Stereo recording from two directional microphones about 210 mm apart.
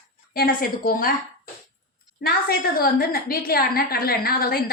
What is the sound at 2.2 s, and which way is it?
A woman's voice, 45° left (ahead or behind).